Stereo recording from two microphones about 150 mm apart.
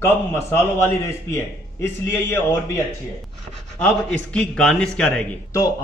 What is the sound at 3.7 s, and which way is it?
A man's voice, 5° left (ahead or behind).